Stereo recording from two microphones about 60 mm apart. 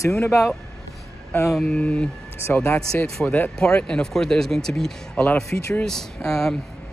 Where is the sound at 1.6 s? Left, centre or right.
Left.